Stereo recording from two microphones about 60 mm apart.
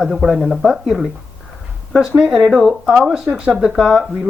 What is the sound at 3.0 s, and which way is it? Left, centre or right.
Speech, centre.